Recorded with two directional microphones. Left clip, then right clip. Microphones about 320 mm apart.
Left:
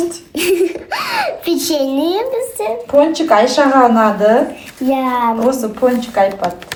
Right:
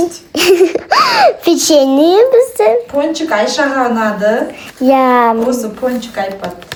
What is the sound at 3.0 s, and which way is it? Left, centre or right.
Speech, centre.